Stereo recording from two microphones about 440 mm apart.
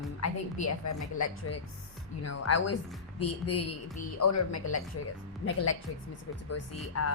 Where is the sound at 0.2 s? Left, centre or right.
Left.